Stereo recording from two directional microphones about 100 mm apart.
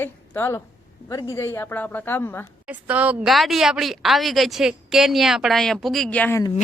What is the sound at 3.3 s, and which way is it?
A woman's voice, centre (ahead or behind).